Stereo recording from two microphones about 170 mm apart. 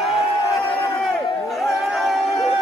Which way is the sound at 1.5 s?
Centre (ahead or behind).